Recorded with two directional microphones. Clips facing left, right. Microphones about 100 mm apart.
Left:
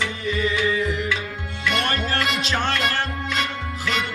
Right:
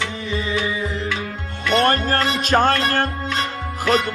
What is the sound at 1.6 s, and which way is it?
Music, 40° right (ahead or behind).